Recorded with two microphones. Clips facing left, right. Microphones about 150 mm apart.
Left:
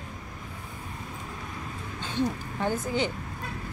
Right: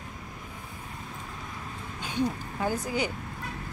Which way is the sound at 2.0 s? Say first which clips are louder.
Even; 10° right (ahead or behind).